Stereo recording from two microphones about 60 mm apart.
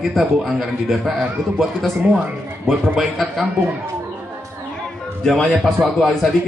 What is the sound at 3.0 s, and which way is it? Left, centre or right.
Speech, centre.